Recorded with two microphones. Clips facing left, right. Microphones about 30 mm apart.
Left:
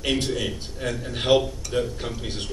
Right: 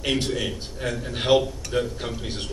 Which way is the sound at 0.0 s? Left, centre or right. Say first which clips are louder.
Even; centre.